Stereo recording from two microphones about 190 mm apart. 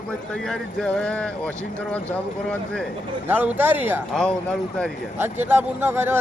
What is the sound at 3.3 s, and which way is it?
Speech, 10° right (ahead or behind).